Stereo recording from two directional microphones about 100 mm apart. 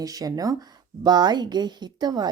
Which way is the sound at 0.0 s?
40° right (ahead or behind).